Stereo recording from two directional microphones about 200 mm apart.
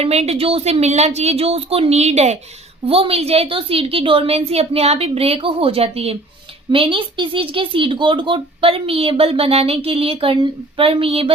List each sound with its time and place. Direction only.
0.0 s speech: 30° right (ahead or behind)